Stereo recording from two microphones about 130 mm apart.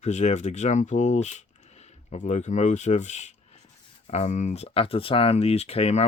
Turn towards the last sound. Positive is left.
turn(degrees=55)  # may be behind; listen again after turning